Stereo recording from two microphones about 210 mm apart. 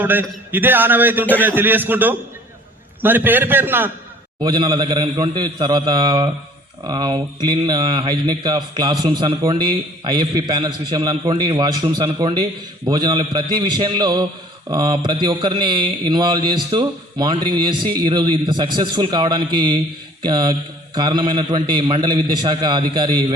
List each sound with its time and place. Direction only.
0.0 s a man's voice: 10° right (ahead or behind)
4.4 s speech: 20° right (ahead or behind)